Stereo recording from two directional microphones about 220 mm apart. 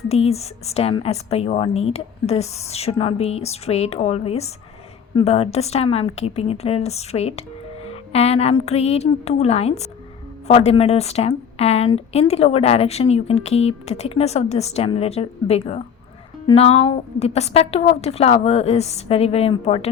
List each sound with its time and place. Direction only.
0.1 s a woman's voice: 30° left (ahead or behind)